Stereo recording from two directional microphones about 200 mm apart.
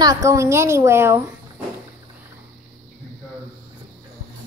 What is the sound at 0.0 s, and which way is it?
A woman's voice, 15° right (ahead or behind).